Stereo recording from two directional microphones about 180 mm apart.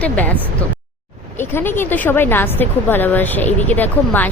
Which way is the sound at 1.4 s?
10° left (ahead or behind).